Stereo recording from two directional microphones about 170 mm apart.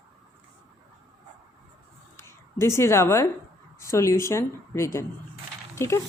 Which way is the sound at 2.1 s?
15° left (ahead or behind).